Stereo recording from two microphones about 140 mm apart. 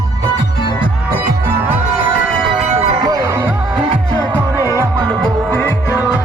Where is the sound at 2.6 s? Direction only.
50° right (ahead or behind).